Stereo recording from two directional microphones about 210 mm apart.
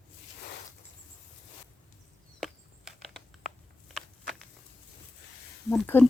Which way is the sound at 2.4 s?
Centre (ahead or behind).